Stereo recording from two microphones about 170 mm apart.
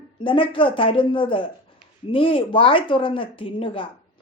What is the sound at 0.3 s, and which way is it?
Speech, 30° left (ahead or behind).